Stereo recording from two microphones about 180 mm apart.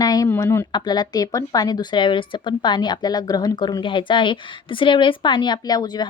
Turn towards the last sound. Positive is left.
turn(degrees=25)  # may be behind; listen again after turning